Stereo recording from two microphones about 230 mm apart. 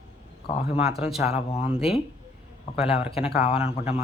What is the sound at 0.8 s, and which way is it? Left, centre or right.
Speech, centre.